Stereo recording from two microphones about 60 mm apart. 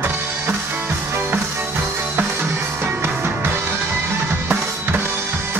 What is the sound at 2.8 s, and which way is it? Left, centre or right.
Music, right.